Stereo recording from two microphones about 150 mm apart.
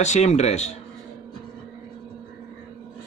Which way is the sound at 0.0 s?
50° left (ahead or behind).